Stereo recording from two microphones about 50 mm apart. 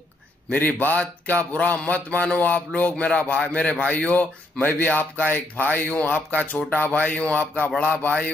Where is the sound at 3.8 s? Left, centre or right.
Left.